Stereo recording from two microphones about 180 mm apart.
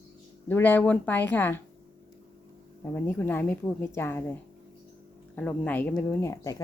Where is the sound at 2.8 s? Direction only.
10° left (ahead or behind).